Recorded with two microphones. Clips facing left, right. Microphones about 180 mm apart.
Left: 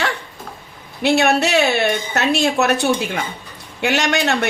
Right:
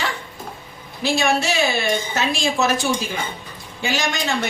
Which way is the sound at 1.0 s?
65° left (ahead or behind).